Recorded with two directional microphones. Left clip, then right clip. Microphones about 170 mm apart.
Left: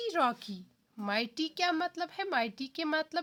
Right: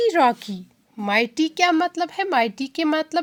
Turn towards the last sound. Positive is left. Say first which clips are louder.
# right 11 dB
turn(degrees=-25)  # may be behind; listen again after turning